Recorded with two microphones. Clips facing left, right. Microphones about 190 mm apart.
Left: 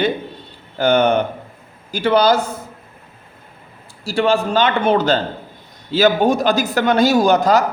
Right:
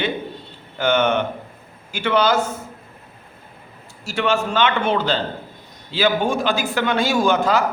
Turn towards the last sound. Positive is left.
turn(degrees=40)  # may be behind; listen again after turning